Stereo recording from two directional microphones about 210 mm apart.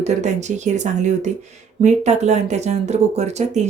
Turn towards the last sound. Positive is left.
turn(degrees=-30)  # may be behind; listen again after turning